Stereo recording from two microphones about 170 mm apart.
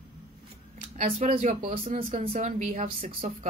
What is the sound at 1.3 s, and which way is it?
A woman's voice, 40° right (ahead or behind).